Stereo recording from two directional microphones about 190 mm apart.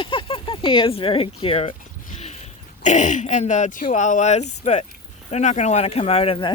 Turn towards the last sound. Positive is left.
turn(degrees=30)  # may be behind; listen again after turning